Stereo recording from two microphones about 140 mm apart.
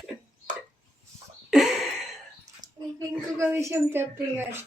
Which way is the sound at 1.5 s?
Centre (ahead or behind).